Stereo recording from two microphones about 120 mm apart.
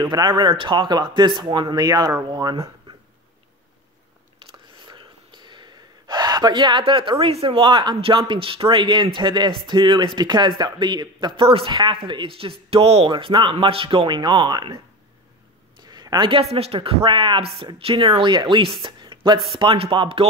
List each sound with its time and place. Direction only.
0.1 s speech: 40° right (ahead or behind)
4.8 s speech: 40° right (ahead or behind); by 13.1 s 55° right (ahead or behind)
13.1 s speech: 45° right (ahead or behind)
15.9 s a sound: 35° right (ahead or behind)
16.5 s speech: 55° right (ahead or behind)